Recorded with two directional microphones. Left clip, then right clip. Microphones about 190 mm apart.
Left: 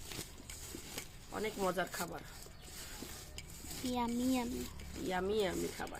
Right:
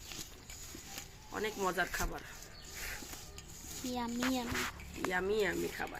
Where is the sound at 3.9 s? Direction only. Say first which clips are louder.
Even; 40° left (ahead or behind).